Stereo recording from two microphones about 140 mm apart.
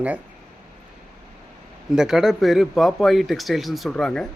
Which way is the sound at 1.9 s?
5° right (ahead or behind).